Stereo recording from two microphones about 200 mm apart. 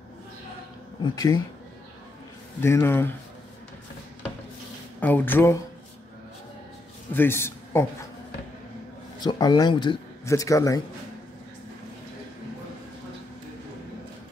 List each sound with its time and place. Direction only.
1.0 s a man's voice: 20° left (ahead or behind)
2.6 s speech: 15° left (ahead or behind)
5.0 s speech: 10° left (ahead or behind)
7.2 s a man's voice: 10° left (ahead or behind)
9.2 s a man's voice: 20° left (ahead or behind)